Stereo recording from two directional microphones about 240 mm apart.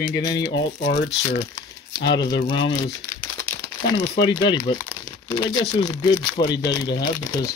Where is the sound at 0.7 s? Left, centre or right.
Left.